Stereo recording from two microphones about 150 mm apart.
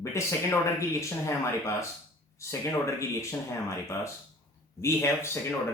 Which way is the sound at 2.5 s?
20° left (ahead or behind).